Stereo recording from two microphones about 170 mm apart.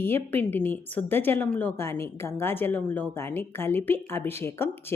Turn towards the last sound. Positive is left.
turn(degrees=15)  # may be behind; listen again after turning